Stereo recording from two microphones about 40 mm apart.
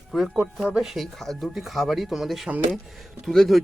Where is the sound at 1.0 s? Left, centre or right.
Centre.